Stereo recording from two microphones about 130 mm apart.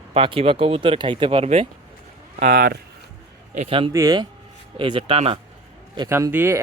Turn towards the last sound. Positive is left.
turn(degrees=-15)  # may be behind; listen again after turning